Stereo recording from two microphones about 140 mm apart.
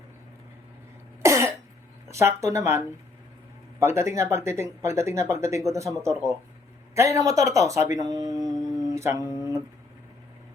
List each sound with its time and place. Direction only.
1.2 s cough: 20° right (ahead or behind)
2.0 s speech: 20° right (ahead or behind)
8.4 s humming: centre (ahead or behind)
9.0 s speech: 20° right (ahead or behind)